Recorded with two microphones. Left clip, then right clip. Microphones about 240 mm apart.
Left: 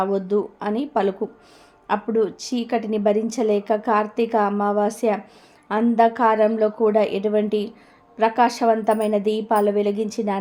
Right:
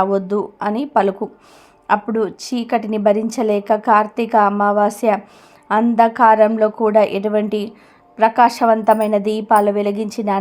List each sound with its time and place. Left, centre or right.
0.0 s a woman's voice: centre